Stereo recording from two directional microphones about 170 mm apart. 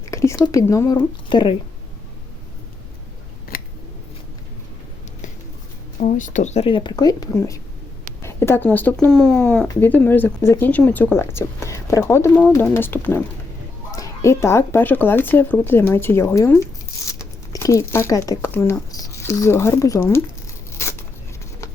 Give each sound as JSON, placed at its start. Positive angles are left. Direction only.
{"t": 0.1, "sound": "speech", "side_deg": 15}
{"t": 3.5, "sound": "scissors", "side_deg": 60}
{"t": 6.0, "sound": "speech", "side_deg": 45}